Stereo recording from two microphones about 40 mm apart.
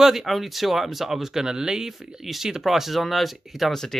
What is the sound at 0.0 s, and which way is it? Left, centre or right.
Speech, centre.